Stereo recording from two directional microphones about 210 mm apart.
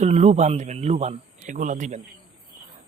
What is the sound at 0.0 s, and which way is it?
Speech, 30° right (ahead or behind).